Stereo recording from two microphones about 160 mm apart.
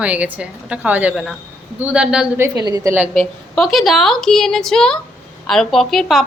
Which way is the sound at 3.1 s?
5° left (ahead or behind).